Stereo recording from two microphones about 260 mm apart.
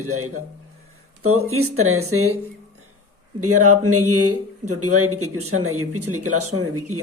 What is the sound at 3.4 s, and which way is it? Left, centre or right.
Speech, right.